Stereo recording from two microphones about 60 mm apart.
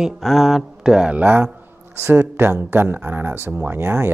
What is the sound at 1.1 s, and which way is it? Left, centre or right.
Speech, right.